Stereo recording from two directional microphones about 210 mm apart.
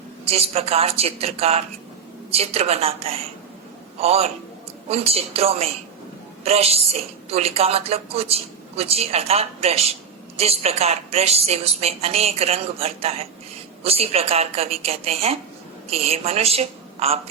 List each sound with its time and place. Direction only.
0.3 s a woman's voice: 30° right (ahead or behind)